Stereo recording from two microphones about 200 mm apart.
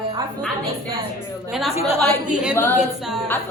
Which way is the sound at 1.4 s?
5° right (ahead or behind).